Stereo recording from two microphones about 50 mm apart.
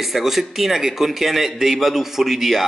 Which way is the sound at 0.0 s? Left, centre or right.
Centre.